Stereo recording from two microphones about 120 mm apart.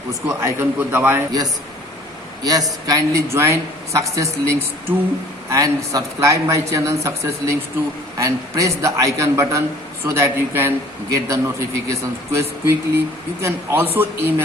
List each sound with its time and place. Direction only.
0.1 s a man's voice: 20° right (ahead or behind)
2.4 s a man's voice: 35° right (ahead or behind); by 14.4 s 20° right (ahead or behind)